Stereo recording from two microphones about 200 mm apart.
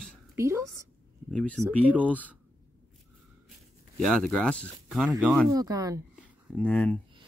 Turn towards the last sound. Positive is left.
turn(degrees=5)  # may be behind; listen again after turning